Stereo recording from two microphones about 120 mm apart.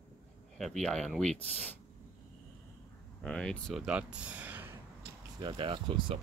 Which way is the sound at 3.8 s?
10° right (ahead or behind).